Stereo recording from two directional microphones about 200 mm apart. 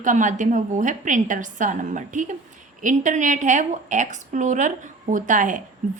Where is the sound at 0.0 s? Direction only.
40° right (ahead or behind).